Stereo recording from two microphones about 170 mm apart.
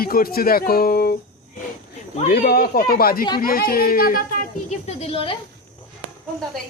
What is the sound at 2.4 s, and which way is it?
A woman's voice, 60° left (ahead or behind).